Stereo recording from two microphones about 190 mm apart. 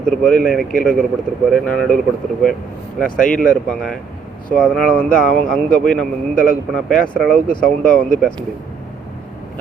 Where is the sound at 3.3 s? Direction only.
5° left (ahead or behind).